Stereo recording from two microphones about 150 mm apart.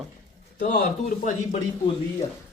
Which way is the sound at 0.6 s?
60° left (ahead or behind).